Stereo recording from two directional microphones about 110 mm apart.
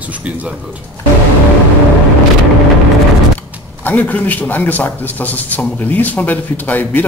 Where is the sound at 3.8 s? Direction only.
15° left (ahead or behind).